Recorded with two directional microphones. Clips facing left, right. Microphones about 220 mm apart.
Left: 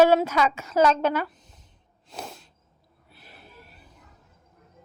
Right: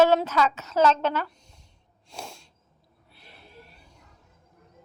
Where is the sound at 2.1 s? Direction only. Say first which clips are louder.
Left 2 dB; centre (ahead or behind).